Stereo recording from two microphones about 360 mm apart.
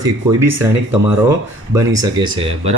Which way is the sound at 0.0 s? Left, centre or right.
Centre.